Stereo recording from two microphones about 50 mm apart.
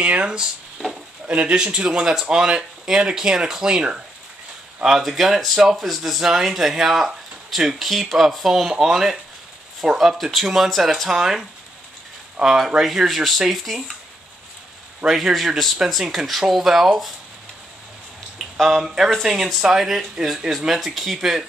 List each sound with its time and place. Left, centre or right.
0.0 s a man's voice: right; by 13.9 s centre
15.0 s speech: centre
18.4 s speech: centre